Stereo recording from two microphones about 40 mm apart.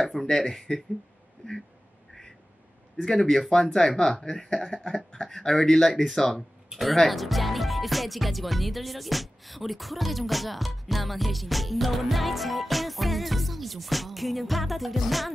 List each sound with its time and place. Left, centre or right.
0.0 s a sound: centre
0.4 s speech: centre
3.0 s speech: centre